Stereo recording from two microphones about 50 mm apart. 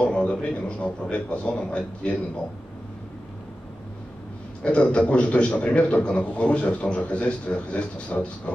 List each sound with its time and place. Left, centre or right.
0.0 s a sound: left
1.1 s a man's voice: left
4.6 s a man's voice: left